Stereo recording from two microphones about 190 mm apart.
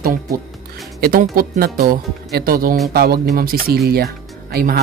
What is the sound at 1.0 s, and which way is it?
Speech, 50° right (ahead or behind).